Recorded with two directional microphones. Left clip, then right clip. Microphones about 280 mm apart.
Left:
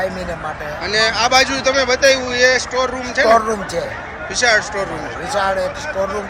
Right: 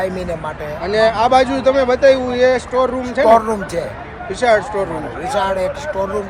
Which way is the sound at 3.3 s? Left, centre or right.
Centre.